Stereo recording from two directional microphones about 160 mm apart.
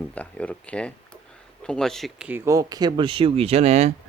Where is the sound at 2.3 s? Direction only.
20° right (ahead or behind); by 3.9 s 45° right (ahead or behind).